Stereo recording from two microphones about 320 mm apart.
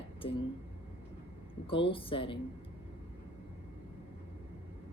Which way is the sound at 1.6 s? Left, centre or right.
Centre.